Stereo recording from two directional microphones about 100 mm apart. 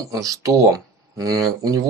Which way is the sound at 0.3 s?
30° right (ahead or behind).